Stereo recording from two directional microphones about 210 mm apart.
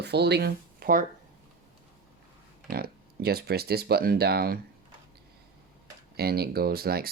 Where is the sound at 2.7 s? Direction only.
45° right (ahead or behind).